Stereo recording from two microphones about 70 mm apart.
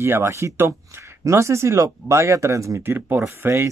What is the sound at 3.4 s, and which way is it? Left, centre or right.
Speech, right.